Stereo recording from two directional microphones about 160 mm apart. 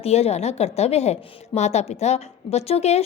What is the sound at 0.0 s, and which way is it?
A woman's voice, 40° left (ahead or behind).